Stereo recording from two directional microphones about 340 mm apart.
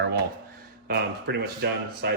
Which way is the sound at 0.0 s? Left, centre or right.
Right.